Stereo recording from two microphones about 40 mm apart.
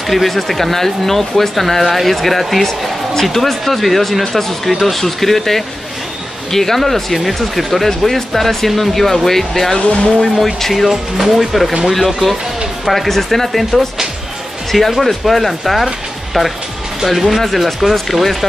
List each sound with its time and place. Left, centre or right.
0.0 s speech: centre
14.9 s speech: centre